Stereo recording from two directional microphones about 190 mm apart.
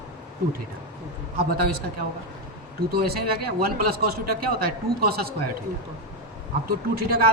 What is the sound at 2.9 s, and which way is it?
A man's voice, 55° right (ahead or behind).